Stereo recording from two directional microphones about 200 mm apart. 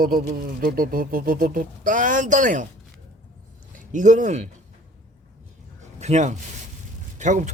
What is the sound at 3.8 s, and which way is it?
Speech, 40° right (ahead or behind).